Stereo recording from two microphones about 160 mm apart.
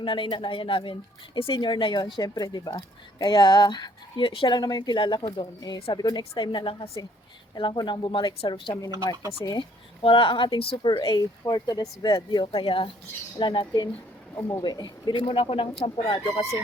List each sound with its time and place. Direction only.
0.0 s speech: 30° left (ahead or behind)
14.3 s speech: 15° left (ahead or behind)
14.6 s speech: 25° left (ahead or behind)